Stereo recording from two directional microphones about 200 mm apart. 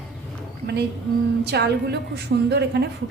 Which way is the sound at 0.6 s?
55° right (ahead or behind).